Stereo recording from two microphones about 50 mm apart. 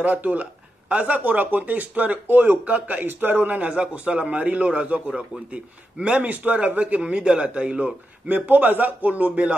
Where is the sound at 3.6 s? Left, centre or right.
Right.